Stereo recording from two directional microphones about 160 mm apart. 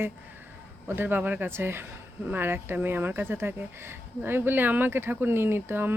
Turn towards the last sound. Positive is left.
turn(degrees=-15)  # may be behind; listen again after turning